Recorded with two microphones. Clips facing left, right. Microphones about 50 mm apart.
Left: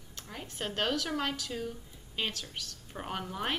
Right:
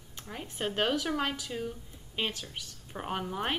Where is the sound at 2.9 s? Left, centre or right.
Centre.